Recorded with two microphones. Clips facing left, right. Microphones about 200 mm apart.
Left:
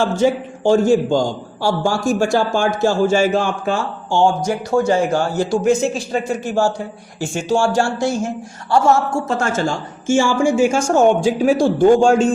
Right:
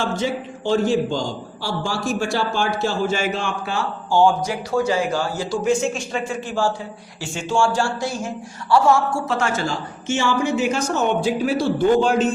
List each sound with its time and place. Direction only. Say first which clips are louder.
0.2 s a man's voice: left 8 dB; 45° left (ahead or behind)